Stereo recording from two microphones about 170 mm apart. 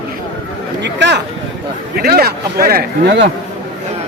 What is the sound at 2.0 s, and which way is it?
A man's voice, 65° right (ahead or behind).